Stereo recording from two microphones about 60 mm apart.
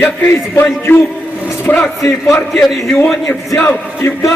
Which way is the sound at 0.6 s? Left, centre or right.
Left.